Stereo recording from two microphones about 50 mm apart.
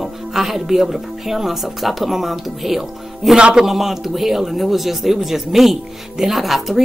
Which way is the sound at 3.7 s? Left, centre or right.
Centre.